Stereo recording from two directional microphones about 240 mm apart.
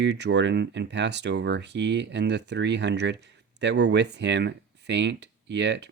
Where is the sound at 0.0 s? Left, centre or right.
Right.